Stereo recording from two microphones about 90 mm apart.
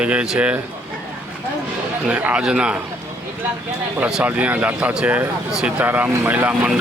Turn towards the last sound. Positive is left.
turn(degrees=-10)  # may be behind; listen again after turning